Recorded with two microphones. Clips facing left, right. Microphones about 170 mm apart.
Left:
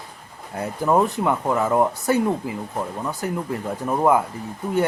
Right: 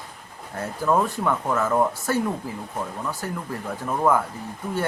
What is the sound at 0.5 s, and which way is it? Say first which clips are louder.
Speech: left 3 dB; 20° left (ahead or behind).